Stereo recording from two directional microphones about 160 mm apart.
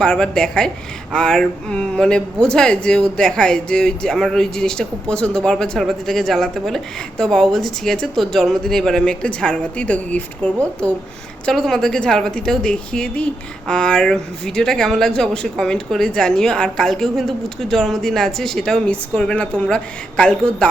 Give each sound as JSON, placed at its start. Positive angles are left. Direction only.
{"t": 0.0, "sound": "speech", "side_deg": 5}